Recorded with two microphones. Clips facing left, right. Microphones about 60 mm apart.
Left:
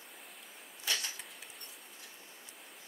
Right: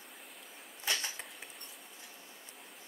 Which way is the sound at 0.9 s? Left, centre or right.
Right.